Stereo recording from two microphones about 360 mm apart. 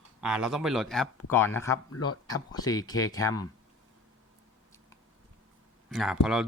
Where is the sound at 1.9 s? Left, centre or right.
Left.